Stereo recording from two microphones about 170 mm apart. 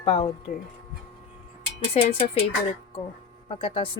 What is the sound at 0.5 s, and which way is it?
Speech, 50° left (ahead or behind).